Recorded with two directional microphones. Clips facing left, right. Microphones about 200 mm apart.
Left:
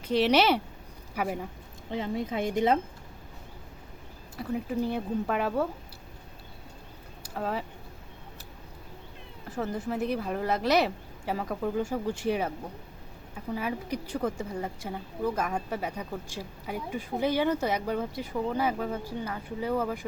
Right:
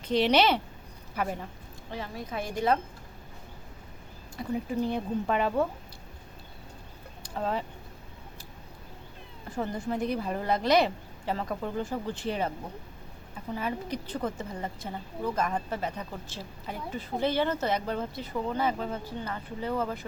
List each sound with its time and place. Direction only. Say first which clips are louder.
0.0 s a woman's voice: even; 5° left (ahead or behind)
1.9 s a woman's voice: left 6 dB; 20° left (ahead or behind)
4.4 s speech: even; 5° left (ahead or behind)
7.2 s a sound: right 1 dB; 5° left (ahead or behind)
9.5 s speech: even; 5° left (ahead or behind)
13.6 s a woman's voice: even; 10° left (ahead or behind)